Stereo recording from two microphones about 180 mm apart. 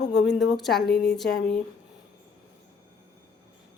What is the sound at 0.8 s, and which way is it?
Speech, 70° left (ahead or behind).